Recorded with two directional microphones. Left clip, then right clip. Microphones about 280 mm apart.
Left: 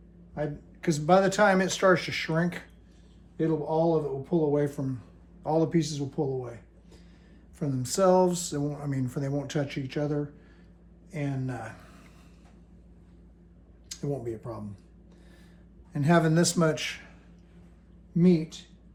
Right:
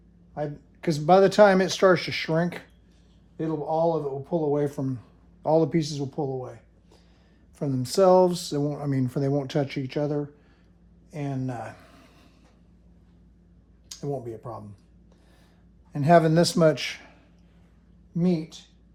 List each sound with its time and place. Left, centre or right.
0.3 s a man's voice: right
7.6 s a man's voice: right
13.9 s speech: centre
15.9 s a man's voice: right
18.1 s speech: centre